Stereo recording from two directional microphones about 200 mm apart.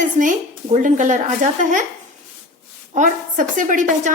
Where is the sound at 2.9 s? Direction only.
40° right (ahead or behind).